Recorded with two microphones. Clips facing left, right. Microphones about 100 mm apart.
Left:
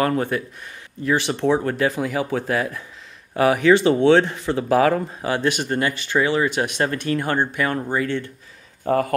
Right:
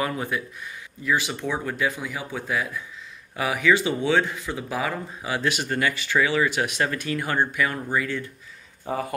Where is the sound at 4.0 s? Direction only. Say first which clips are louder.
Left 7 dB; 65° left (ahead or behind).